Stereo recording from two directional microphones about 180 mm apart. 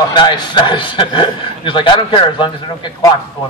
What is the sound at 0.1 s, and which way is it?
A man's voice, 25° left (ahead or behind).